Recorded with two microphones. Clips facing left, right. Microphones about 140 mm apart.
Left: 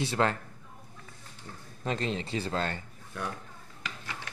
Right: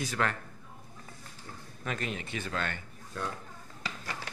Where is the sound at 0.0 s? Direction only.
25° left (ahead or behind).